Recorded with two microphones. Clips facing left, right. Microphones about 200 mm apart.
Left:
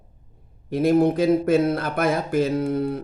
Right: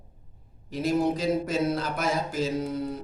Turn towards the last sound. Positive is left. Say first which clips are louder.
# left 6 dB
turn(degrees=60)  # may be behind; listen again after turning